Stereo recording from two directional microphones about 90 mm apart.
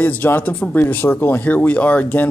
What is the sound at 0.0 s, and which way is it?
Speech, 20° left (ahead or behind).